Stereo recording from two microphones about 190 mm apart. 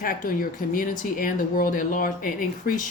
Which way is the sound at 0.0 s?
45° left (ahead or behind).